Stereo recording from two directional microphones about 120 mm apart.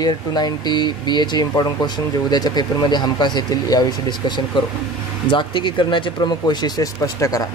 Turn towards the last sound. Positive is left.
turn(degrees=25)  # may be behind; listen again after turning